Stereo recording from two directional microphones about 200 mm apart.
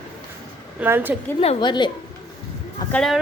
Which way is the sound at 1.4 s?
25° left (ahead or behind).